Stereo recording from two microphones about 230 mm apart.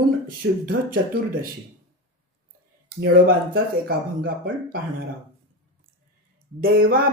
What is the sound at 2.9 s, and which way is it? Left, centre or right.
A man's voice, right.